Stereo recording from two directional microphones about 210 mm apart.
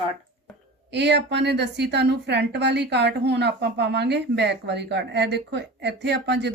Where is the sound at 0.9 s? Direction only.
55° right (ahead or behind).